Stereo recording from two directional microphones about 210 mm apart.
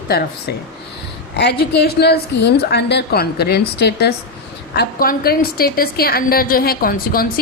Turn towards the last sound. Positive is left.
turn(degrees=45)  # may be behind; listen again after turning